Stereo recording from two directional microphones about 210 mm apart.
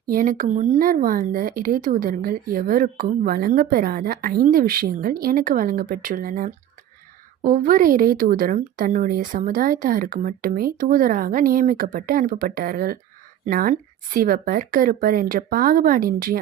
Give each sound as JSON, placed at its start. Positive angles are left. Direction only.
{"t": 0.1, "sound": "speech", "side_deg": -40}